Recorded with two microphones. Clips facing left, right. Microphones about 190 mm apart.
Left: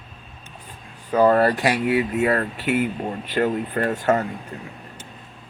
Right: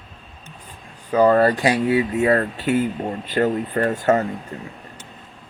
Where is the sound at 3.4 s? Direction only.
40° right (ahead or behind).